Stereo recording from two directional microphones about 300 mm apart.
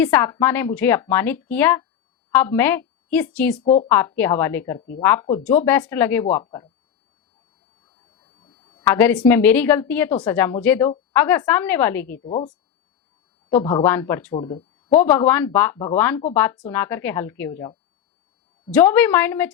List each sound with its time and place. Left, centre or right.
0.0 s a woman's voice: centre
3.6 s speech: left
3.8 s a woman's voice: centre
8.2 s a sound: centre
8.9 s a woman's voice: centre
12.2 s speech: left
13.6 s a woman's voice: centre
14.3 s a woman's voice: centre
15.0 s a woman's voice: centre